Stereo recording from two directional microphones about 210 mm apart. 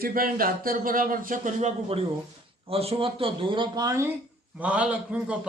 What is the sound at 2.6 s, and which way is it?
A man's voice, 25° right (ahead or behind).